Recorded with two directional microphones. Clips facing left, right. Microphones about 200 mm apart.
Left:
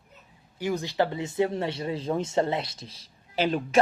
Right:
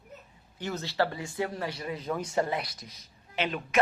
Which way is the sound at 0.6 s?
10° left (ahead or behind).